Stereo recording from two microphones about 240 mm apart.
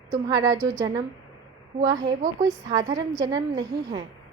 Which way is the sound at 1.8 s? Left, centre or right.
Centre.